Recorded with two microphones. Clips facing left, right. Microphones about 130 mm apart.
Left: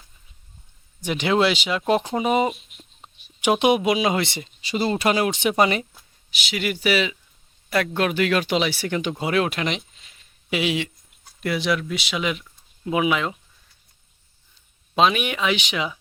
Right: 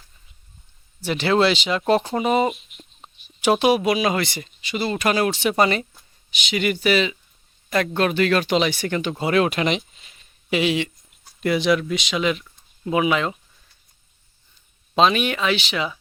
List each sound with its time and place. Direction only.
1.0 s speech: 15° left (ahead or behind)
2.5 s a sound: 5° right (ahead or behind)
3.4 s speech: 15° left (ahead or behind)
4.6 s speech: 35° left (ahead or behind)
5.1 s speech: 15° left (ahead or behind)
14.9 s speech: 10° left (ahead or behind)